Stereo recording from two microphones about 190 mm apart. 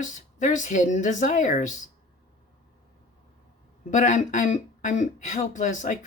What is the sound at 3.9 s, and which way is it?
Speech, 40° left (ahead or behind).